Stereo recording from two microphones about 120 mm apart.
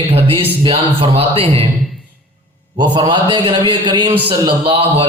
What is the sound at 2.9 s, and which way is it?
A man's voice, 40° right (ahead or behind).